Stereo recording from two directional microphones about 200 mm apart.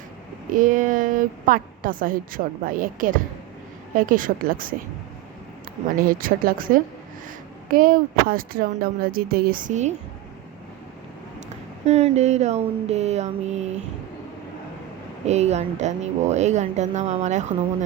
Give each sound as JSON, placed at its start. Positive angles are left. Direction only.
{"t": 0.5, "sound": "a woman's voice", "side_deg": -40}
{"t": 6.0, "sound": "a woman's voice", "side_deg": -45}
{"t": 11.3, "sound": "speech", "side_deg": -35}
{"t": 15.3, "sound": "speech", "side_deg": -35}